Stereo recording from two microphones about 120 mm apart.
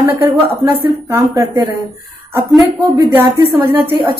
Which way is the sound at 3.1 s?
15° right (ahead or behind).